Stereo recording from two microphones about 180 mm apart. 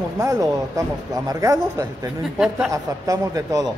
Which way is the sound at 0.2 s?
15° right (ahead or behind).